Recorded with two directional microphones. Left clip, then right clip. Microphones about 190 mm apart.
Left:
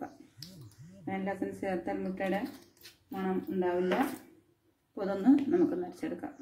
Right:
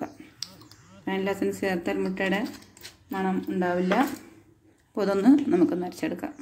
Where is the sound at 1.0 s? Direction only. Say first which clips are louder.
Right 8 dB; 40° right (ahead or behind).